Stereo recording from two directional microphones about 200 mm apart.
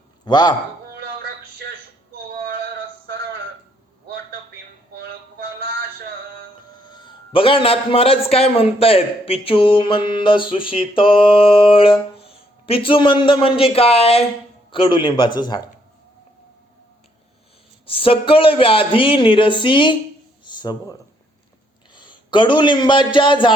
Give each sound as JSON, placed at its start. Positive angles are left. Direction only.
{"t": 0.3, "sound": "a man's voice", "side_deg": 20}
{"t": 0.9, "sound": "a sound", "side_deg": -50}
{"t": 4.9, "sound": "music", "side_deg": -50}
{"t": 6.8, "sound": "a man's voice", "side_deg": 25}
{"t": 17.8, "sound": "a man's voice", "side_deg": 25}
{"t": 20.4, "sound": "a sound", "side_deg": 20}
{"t": 21.9, "sound": "a man's voice", "side_deg": 25}